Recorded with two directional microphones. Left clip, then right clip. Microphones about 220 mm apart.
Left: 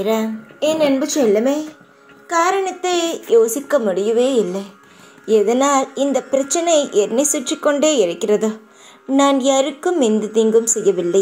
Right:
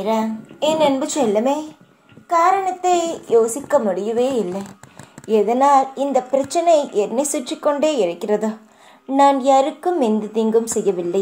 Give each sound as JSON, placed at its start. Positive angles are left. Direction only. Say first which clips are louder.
{"t": 0.0, "sound": "a child's voice", "louder": "left 1 dB", "side_deg": 30}